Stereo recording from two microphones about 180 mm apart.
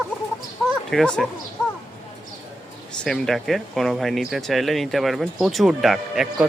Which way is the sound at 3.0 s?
Centre (ahead or behind).